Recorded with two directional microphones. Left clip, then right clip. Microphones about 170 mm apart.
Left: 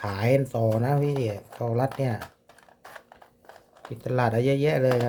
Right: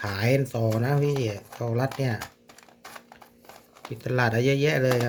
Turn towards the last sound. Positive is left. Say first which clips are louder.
# left 1 dB
turn(degrees=10)  # may be behind; listen again after turning